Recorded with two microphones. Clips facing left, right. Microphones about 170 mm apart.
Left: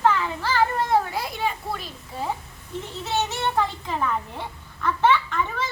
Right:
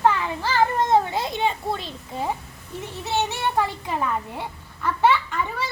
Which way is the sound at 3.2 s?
10° right (ahead or behind).